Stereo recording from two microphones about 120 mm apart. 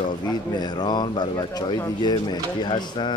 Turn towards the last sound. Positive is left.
turn(degrees=40)  # may be behind; listen again after turning